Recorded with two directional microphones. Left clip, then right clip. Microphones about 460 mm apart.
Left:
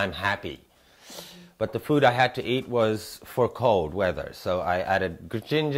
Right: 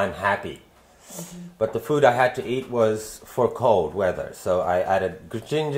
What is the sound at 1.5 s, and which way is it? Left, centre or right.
Speech, left.